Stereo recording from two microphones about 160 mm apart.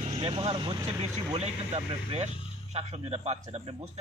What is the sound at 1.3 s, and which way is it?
A man's voice, 40° right (ahead or behind).